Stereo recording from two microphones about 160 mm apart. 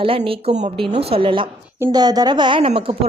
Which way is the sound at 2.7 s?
40° right (ahead or behind).